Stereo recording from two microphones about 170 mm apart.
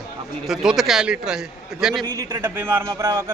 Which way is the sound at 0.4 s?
Centre (ahead or behind).